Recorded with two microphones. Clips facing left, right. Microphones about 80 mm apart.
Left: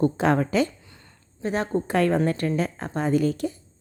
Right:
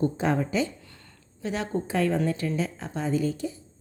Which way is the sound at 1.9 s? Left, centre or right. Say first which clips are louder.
Left 4 dB; left.